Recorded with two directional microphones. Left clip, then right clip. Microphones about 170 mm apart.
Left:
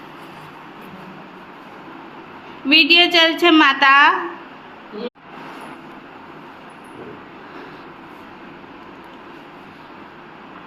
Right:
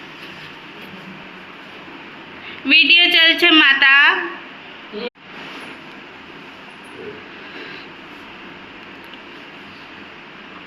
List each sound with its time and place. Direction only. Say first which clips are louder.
2.6 s a woman's voice: right 1 dB; 10° left (ahead or behind)